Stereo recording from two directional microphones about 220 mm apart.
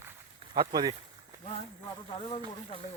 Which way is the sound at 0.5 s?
20° right (ahead or behind).